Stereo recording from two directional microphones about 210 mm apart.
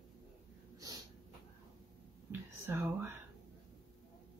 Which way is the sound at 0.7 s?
20° right (ahead or behind).